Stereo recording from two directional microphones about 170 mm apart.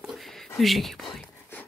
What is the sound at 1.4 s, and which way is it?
Whispering, 10° left (ahead or behind).